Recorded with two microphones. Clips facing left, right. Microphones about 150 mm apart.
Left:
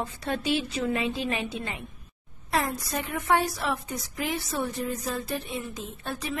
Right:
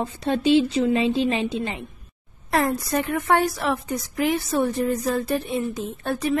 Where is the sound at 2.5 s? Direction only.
55° right (ahead or behind).